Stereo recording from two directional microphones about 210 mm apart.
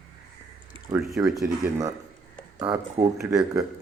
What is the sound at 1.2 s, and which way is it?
Speech, 15° right (ahead or behind).